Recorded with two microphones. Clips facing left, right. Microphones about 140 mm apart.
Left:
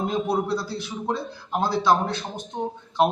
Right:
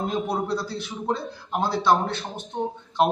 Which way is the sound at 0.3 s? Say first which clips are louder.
Left 2 dB; centre (ahead or behind).